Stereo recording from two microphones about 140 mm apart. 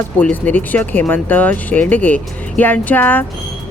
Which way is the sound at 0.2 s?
10° left (ahead or behind).